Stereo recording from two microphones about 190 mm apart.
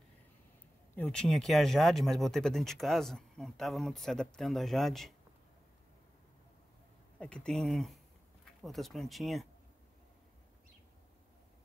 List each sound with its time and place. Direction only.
0.9 s speech: 5° left (ahead or behind)
7.2 s speech: 5° left (ahead or behind)